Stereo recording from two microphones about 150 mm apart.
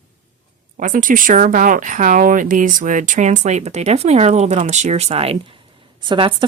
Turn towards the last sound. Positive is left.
turn(degrees=-35)  # may be behind; listen again after turning